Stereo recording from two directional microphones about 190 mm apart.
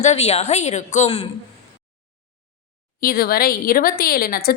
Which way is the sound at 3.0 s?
50° left (ahead or behind).